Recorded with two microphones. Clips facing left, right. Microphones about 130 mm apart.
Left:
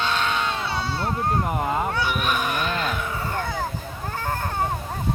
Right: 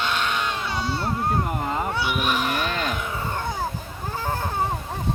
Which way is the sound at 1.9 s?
10° right (ahead or behind).